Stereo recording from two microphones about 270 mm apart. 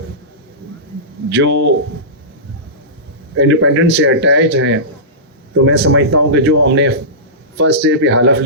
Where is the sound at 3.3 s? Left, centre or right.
Right.